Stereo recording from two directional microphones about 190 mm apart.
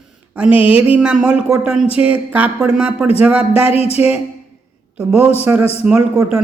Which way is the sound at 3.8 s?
30° left (ahead or behind).